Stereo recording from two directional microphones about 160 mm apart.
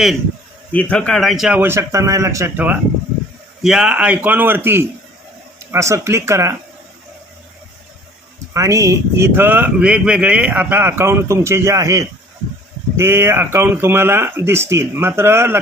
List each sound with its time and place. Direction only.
0.7 s speech: 10° left (ahead or behind); by 2.7 s 15° right (ahead or behind)
3.6 s speech: 5° right (ahead or behind)
8.5 s speech: 20° right (ahead or behind)